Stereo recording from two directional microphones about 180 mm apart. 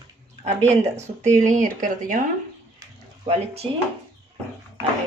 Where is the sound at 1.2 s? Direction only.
40° right (ahead or behind).